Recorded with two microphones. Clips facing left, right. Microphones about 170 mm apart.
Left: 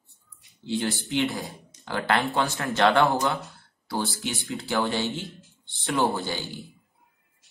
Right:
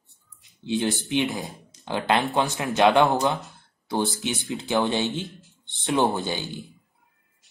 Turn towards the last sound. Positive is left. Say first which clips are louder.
# right 2 dB
turn(degrees=-20)  # may be behind; listen again after turning